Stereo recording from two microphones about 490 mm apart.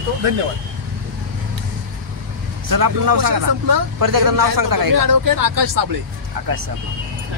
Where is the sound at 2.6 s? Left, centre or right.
Right.